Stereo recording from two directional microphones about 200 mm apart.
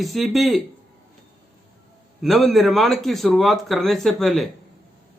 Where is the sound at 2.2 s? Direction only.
Centre (ahead or behind).